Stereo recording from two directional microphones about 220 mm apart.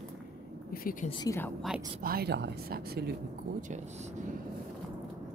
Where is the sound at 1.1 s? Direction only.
15° left (ahead or behind).